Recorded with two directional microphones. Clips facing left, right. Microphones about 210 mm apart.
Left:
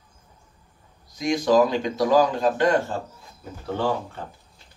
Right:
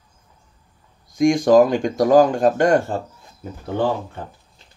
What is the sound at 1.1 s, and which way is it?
Speech, 50° right (ahead or behind).